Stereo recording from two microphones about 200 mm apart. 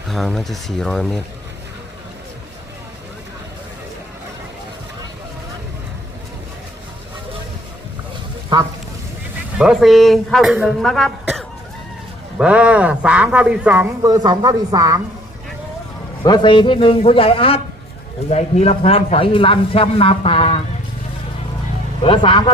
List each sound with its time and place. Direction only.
0.1 s speech: centre (ahead or behind)
8.5 s speech: 20° right (ahead or behind)
9.6 s speech: centre (ahead or behind); by 15.0 s 15° right (ahead or behind)
16.2 s speech: 20° left (ahead or behind)
22.0 s speech: 25° left (ahead or behind)